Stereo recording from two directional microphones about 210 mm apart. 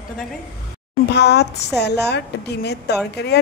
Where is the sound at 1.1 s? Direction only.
55° left (ahead or behind).